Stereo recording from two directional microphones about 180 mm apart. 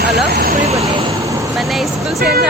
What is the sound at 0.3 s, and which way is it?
Vehicle, 60° right (ahead or behind).